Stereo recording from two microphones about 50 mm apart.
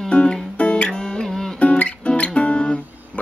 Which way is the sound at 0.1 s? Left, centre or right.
Centre.